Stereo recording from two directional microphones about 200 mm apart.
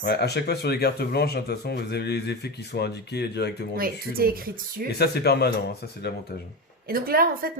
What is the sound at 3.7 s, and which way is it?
A woman's voice, 50° right (ahead or behind).